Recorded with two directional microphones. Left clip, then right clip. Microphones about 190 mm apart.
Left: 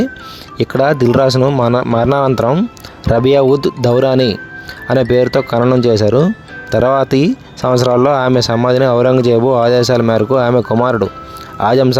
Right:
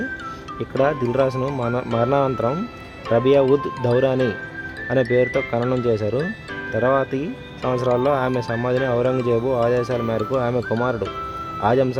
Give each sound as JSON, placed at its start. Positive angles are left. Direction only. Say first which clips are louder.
{"t": 0.6, "sound": "speech", "louder": "left 8 dB", "side_deg": 45}
{"t": 5.8, "sound": "speech", "louder": "left 10 dB", "side_deg": 50}